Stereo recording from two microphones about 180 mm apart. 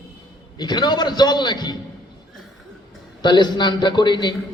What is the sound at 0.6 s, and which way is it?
A man's voice, 25° left (ahead or behind).